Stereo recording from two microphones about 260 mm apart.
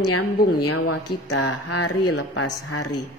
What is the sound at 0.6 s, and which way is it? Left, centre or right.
Speech, left.